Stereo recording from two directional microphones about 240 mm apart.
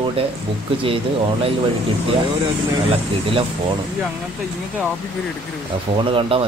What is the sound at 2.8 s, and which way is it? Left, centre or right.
Speech, right.